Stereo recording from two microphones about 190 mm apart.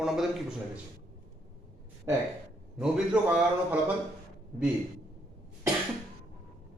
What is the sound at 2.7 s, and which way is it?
A man's voice, 5° right (ahead or behind).